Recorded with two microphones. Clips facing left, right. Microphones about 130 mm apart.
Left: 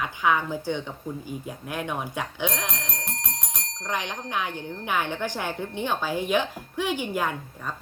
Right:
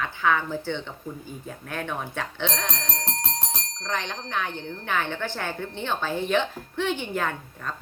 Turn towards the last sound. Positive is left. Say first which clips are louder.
# even
turn(degrees=10)  # may be behind; listen again after turning